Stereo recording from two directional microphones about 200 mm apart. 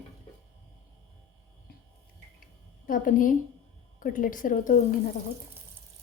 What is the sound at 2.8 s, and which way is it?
A woman's voice, 45° left (ahead or behind).